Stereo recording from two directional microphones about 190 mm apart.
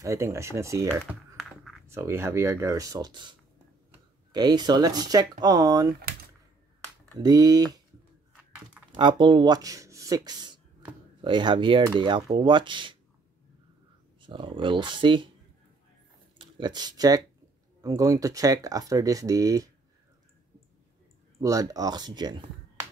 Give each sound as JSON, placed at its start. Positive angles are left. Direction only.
{"t": 0.0, "sound": "speech", "side_deg": -15}
{"t": 1.3, "sound": "a sound", "side_deg": 0}
{"t": 1.9, "sound": "speech", "side_deg": -10}
{"t": 7.2, "sound": "speech", "side_deg": -20}
{"t": 8.9, "sound": "speech", "side_deg": -25}
{"t": 14.2, "sound": "speech", "side_deg": -25}
{"t": 16.3, "sound": "speech", "side_deg": -25}
{"t": 21.4, "sound": "speech", "side_deg": -20}